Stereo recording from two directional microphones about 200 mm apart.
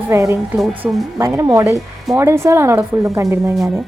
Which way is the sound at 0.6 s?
Centre (ahead or behind).